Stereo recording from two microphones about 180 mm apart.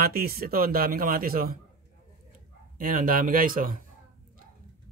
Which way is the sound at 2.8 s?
50° right (ahead or behind).